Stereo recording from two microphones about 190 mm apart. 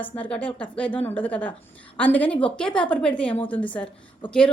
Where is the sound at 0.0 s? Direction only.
10° left (ahead or behind).